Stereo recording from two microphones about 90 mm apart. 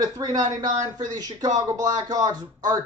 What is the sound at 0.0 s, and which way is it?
A man's voice, 45° right (ahead or behind).